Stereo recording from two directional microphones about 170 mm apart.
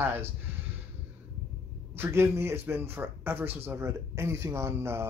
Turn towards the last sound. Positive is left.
turn(degrees=-15)  # may be behind; listen again after turning